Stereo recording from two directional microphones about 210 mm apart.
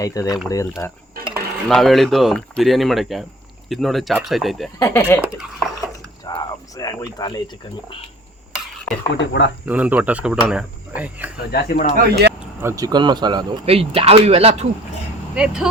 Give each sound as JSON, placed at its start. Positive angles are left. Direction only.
{"t": 0.0, "sound": "speech", "side_deg": 15}
{"t": 1.3, "sound": "speech", "side_deg": 0}
{"t": 4.8, "sound": "speech", "side_deg": 10}
{"t": 5.4, "sound": "a sound", "side_deg": 0}
{"t": 6.2, "sound": "speech", "side_deg": 20}
{"t": 9.1, "sound": "speech", "side_deg": 60}
{"t": 9.6, "sound": "speech", "side_deg": -5}
{"t": 11.5, "sound": "speech", "side_deg": 45}
{"t": 11.9, "sound": "speech", "side_deg": -50}
{"t": 12.4, "sound": "speech", "side_deg": -10}